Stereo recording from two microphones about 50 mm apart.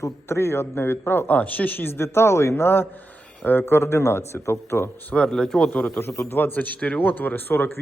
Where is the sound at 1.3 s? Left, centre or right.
Left.